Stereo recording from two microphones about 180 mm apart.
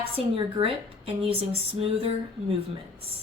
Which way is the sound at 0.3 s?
30° right (ahead or behind).